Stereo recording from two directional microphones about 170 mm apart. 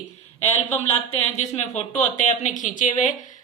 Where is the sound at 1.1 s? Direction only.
40° left (ahead or behind).